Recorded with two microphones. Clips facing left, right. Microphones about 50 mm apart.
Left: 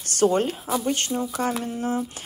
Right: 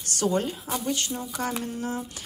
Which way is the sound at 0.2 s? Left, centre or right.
Left.